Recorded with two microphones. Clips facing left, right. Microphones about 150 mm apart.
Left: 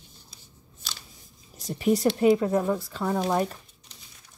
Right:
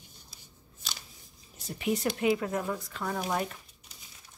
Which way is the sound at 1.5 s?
40° left (ahead or behind).